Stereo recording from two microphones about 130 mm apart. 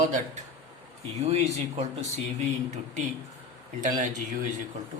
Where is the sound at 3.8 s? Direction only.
80° right.